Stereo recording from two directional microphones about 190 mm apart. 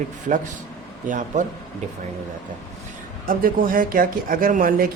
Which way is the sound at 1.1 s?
40° right (ahead or behind).